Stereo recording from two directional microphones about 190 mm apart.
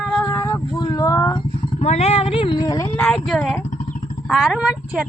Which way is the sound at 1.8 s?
35° left (ahead or behind).